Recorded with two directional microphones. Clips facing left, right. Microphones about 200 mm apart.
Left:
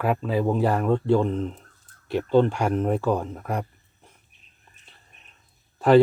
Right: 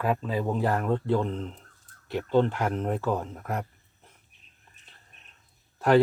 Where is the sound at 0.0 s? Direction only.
15° left (ahead or behind).